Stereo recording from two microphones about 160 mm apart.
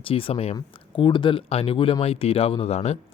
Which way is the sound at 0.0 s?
35° left (ahead or behind).